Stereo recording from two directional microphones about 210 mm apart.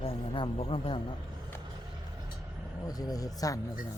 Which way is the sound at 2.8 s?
15° left (ahead or behind).